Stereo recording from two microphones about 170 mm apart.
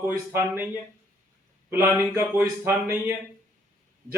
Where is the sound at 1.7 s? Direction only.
15° right (ahead or behind).